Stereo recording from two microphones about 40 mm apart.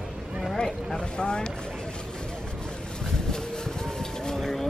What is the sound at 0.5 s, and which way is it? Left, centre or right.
Vehicle, centre.